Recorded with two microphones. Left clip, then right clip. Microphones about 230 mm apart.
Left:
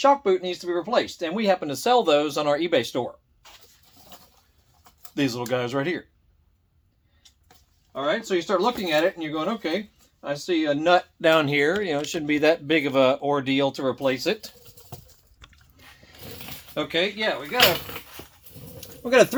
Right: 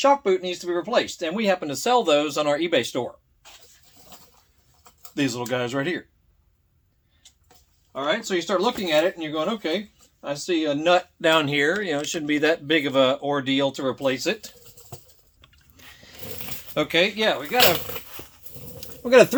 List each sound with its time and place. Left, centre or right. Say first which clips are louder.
0.0 s speech: even; centre
4.8 s speech: even; centre
7.9 s speech: even; centre
14.3 s pigeon: even; centre
15.8 s a sound: right 3 dB; right
16.7 s speech: right 4 dB; right
18.8 s a sound: right 3 dB; right